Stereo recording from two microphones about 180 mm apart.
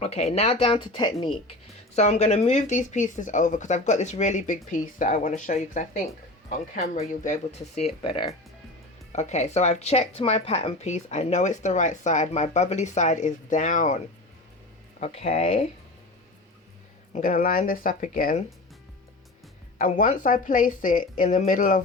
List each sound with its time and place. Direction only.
0.0 s a woman's voice: 35° left (ahead or behind)
2.0 s a woman's voice: 40° left (ahead or behind)
15.0 s a woman's voice: 35° left (ahead or behind)
17.1 s speech: 50° left (ahead or behind)
19.8 s speech: 50° left (ahead or behind)